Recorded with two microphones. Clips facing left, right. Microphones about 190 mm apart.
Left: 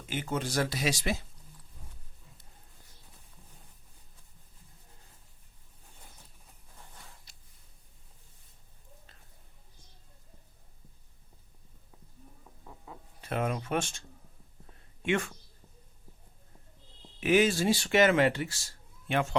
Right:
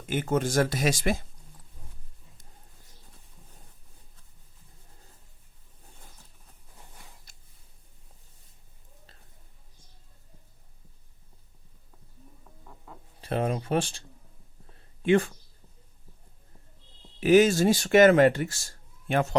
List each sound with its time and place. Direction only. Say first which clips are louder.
0.0 s speech: right 7 dB; 50° right (ahead or behind)
7.3 s a sound: right 1 dB; 50° right (ahead or behind)
13.2 s speech: right 4 dB; 30° right (ahead or behind)
15.0 s speech: right 8 dB; 35° right (ahead or behind)
17.2 s speech: right 6 dB; 40° right (ahead or behind)